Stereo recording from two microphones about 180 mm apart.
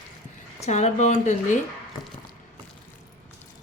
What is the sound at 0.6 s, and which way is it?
Speech, 40° left (ahead or behind).